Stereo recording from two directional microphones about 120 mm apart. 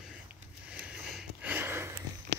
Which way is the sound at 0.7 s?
10° right (ahead or behind).